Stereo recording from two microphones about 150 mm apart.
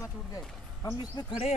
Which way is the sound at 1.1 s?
35° left (ahead or behind).